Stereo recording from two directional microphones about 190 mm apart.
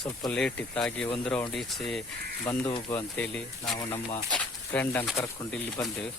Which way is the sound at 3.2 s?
5° left (ahead or behind).